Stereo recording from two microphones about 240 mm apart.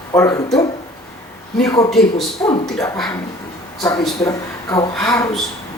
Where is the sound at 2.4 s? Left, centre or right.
Centre.